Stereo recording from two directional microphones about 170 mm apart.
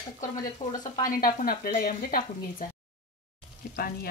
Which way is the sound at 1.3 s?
60° left (ahead or behind).